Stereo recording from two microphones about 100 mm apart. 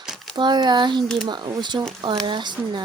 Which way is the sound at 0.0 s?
5° right (ahead or behind).